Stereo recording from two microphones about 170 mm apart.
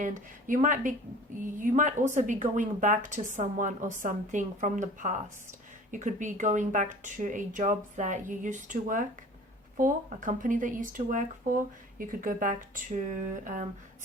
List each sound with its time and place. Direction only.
0.0 s speech: 50° right (ahead or behind)